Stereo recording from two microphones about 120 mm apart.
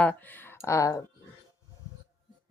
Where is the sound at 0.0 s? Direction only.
15° left (ahead or behind).